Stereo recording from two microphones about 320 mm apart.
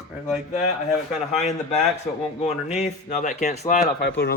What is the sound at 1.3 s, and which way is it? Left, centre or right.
Speech, left.